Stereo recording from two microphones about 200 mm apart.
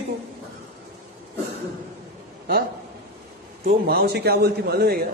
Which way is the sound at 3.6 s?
50° right (ahead or behind).